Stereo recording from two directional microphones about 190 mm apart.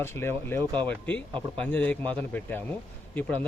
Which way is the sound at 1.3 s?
25° right (ahead or behind).